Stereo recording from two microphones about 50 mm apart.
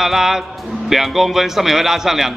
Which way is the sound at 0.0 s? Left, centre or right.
Centre.